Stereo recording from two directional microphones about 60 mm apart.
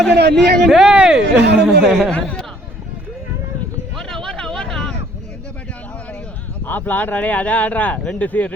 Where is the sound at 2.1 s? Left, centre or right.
Centre.